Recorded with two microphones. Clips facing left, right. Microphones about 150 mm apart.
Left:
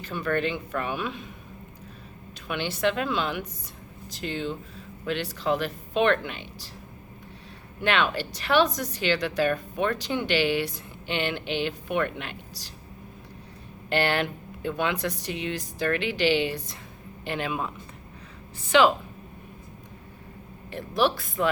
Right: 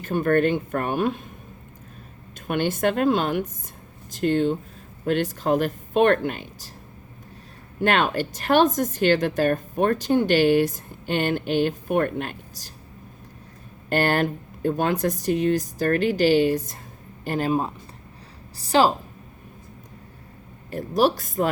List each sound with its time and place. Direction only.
0.0 s a woman's voice: 50° right (ahead or behind)
2.5 s a woman's voice: 50° right (ahead or behind)
7.8 s a woman's voice: 45° right (ahead or behind)
13.9 s a woman's voice: 45° right (ahead or behind)
20.7 s a woman's voice: 40° right (ahead or behind)